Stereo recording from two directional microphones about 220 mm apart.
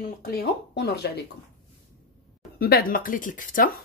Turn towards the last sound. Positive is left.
turn(degrees=40)  # may be behind; listen again after turning